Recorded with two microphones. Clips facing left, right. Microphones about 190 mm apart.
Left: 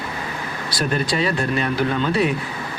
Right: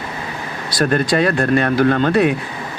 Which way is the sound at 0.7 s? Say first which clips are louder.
Right 6 dB; 55° right (ahead or behind).